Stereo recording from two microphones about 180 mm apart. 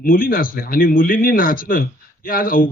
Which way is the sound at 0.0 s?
55° left (ahead or behind).